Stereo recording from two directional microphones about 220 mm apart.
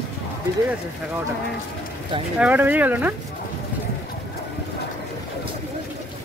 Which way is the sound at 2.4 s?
5° right (ahead or behind).